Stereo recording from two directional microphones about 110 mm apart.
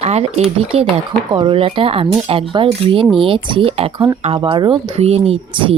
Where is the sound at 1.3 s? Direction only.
50° right (ahead or behind).